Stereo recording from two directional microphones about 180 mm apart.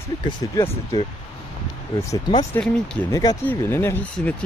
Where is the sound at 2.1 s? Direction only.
15° left (ahead or behind).